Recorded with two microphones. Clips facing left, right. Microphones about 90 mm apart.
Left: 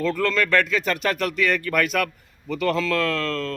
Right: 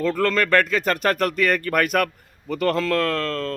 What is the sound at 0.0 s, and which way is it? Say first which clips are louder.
A man's voice: right 2 dB; 45° right (ahead or behind).